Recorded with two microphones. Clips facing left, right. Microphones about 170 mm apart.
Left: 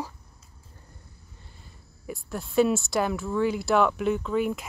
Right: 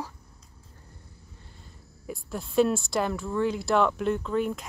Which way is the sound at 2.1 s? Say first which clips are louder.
Left 1 dB; centre (ahead or behind).